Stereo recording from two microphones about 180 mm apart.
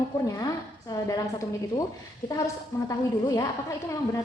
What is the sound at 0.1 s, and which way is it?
A woman's voice, 10° left (ahead or behind).